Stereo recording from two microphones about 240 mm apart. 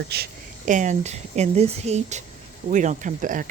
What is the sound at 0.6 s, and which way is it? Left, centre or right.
Speech, right.